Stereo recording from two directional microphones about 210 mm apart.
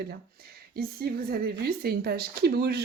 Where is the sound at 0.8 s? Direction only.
45° right (ahead or behind).